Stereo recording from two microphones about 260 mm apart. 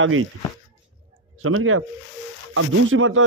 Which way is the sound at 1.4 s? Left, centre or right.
Right.